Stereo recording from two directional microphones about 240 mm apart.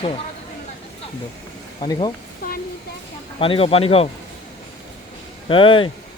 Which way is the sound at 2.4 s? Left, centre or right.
Left.